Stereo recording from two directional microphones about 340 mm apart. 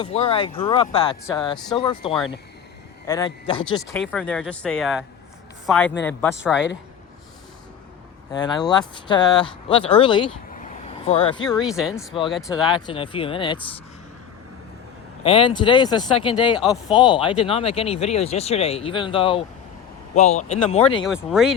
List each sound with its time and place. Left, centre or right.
0.0 s speech: centre
3.8 s speech: centre
8.3 s speech: centre
11.4 s speech: centre
11.9 s speech: centre
12.3 s speech: centre
12.6 s speech: centre
15.2 s speech: centre
21.1 s speech: centre